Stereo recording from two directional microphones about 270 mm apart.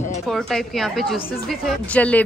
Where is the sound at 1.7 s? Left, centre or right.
Centre.